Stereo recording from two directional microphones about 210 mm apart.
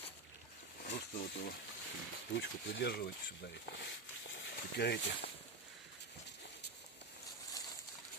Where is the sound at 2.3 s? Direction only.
60° left (ahead or behind).